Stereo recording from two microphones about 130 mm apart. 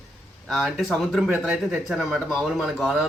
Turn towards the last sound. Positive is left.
turn(degrees=-5)  # may be behind; listen again after turning